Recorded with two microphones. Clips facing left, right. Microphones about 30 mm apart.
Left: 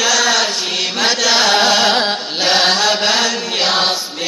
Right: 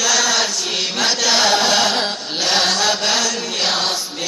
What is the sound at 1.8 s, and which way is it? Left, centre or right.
Carnatic music, left.